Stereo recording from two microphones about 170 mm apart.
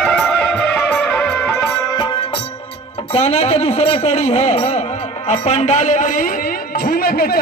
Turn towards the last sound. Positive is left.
turn(degrees=65)  # may be behind; listen again after turning